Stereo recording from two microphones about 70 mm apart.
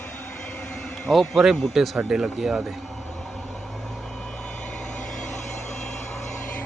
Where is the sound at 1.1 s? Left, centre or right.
Centre.